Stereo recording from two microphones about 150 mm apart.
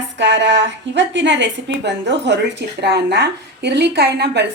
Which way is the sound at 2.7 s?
90° right.